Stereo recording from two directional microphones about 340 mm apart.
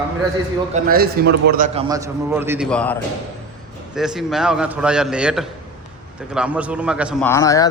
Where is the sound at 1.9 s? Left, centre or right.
Centre.